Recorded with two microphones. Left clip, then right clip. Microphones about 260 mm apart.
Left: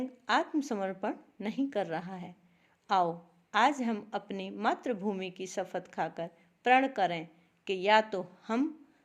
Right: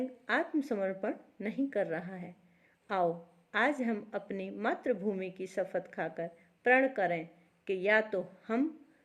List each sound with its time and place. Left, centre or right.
0.0 s a woman's voice: left